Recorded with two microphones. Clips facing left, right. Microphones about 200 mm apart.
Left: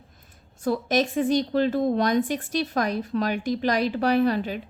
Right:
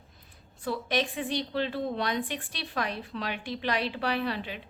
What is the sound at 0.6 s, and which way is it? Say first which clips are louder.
A woman's voice: left 7 dB; 45° left (ahead or behind).